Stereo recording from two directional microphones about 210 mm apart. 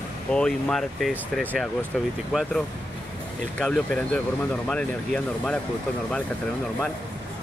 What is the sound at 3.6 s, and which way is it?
Speech, 5° left (ahead or behind).